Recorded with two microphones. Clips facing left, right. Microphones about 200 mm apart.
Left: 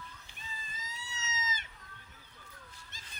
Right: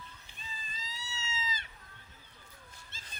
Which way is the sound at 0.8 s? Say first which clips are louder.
Even; 20° left (ahead or behind).